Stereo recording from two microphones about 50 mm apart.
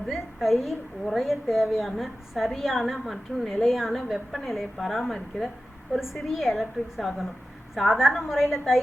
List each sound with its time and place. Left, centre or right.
0.1 s a woman's voice: centre